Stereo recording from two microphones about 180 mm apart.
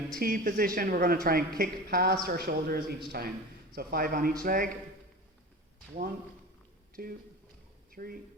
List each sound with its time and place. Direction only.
0.2 s speech: 50° right (ahead or behind)
7.0 s speech: 55° right (ahead or behind)